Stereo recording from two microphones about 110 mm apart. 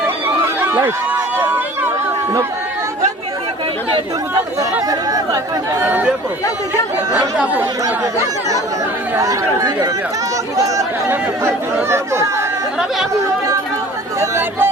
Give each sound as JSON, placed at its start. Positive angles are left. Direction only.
{"t": 0.6, "sound": "run", "side_deg": -25}
{"t": 1.4, "sound": "a sound", "side_deg": -20}
{"t": 4.9, "sound": "speech", "side_deg": -35}
{"t": 5.8, "sound": "speech", "side_deg": -15}
{"t": 9.1, "sound": "speech", "side_deg": -30}
{"t": 11.1, "sound": "speech", "side_deg": -20}
{"t": 14.2, "sound": "speech", "side_deg": -20}